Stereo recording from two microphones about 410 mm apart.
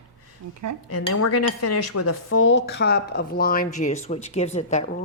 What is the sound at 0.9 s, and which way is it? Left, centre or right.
Speech, left.